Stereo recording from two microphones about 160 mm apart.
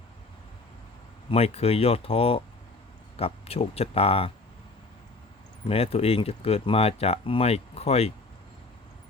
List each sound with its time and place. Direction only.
1.3 s speech: 40° left (ahead or behind)
5.6 s speech: 35° left (ahead or behind)